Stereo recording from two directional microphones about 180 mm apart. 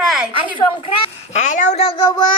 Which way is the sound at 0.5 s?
30° left (ahead or behind).